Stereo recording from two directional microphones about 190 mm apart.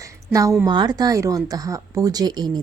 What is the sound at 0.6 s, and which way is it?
Speech, 20° right (ahead or behind).